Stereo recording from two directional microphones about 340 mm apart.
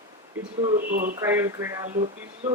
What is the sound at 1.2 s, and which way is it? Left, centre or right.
Speech, centre.